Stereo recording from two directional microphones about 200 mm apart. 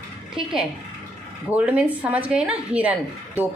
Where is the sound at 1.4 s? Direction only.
10° right (ahead or behind).